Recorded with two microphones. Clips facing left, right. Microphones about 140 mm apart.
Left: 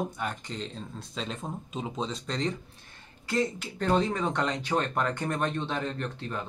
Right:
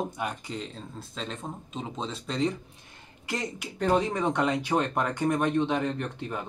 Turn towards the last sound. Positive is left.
turn(degrees=-10)  # may be behind; listen again after turning